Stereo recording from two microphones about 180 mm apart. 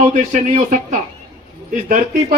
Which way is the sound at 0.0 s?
40° right (ahead or behind).